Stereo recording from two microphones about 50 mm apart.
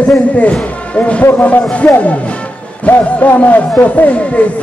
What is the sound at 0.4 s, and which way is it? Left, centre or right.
Speech, left.